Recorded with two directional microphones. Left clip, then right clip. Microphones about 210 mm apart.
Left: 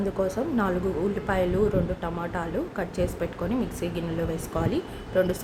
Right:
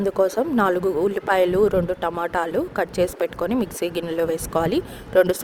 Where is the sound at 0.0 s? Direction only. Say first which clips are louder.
Right 7 dB; 40° right (ahead or behind).